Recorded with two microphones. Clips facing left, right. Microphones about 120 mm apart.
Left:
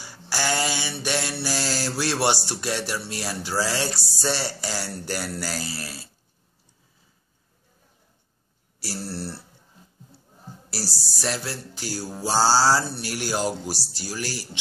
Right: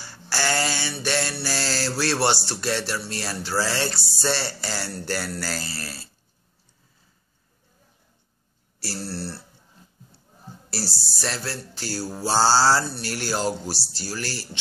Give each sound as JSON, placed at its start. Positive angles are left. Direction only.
{"t": 0.0, "sound": "mantra", "side_deg": 15}
{"t": 8.7, "sound": "speech", "side_deg": 15}
{"t": 10.7, "sound": "mantra", "side_deg": 10}